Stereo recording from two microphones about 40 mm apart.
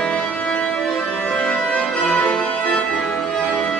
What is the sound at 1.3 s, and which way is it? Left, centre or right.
Music, left.